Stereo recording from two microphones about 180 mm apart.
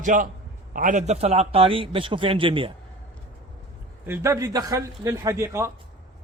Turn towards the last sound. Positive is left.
turn(degrees=-15)  # may be behind; listen again after turning